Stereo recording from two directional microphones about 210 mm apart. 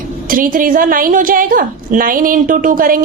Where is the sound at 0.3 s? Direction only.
40° right (ahead or behind).